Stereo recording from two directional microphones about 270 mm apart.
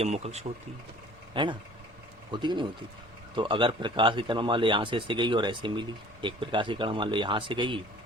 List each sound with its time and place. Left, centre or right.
0.0 s a man's voice: right